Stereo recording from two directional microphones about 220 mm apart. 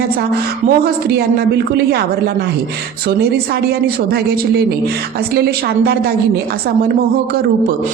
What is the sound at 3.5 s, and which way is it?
A woman's voice, 45° right (ahead or behind).